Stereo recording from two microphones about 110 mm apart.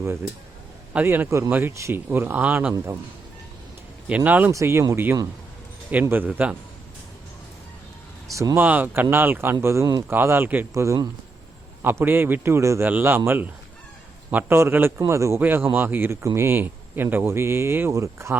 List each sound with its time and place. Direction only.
1.0 s a man's voice: 20° right (ahead or behind)
2.7 s a man's voice: 25° right (ahead or behind)
4.1 s a man's voice: 15° right (ahead or behind)
4.5 s a man's voice: 25° right (ahead or behind)
8.3 s a man's voice: 30° right (ahead or behind)
8.6 s a man's voice: 15° right (ahead or behind); by 11.1 s 30° right (ahead or behind)
11.8 s a man's voice: 20° right (ahead or behind)